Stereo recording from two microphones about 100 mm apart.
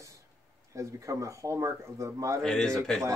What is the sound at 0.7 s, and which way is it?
Speech, 30° right (ahead or behind).